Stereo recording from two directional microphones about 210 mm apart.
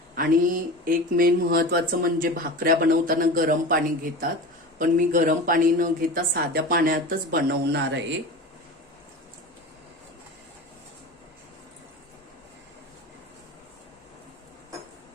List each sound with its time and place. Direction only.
0.2 s a woman's voice: 45° right (ahead or behind)